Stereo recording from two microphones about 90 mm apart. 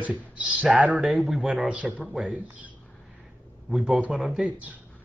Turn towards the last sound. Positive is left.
turn(degrees=-5)  # may be behind; listen again after turning